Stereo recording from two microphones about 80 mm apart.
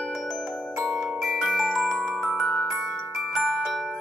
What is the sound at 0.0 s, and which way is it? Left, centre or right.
Glockenspiel, centre.